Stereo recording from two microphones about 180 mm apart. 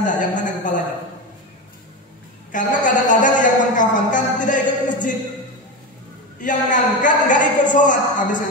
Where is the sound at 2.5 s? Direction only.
45° left (ahead or behind).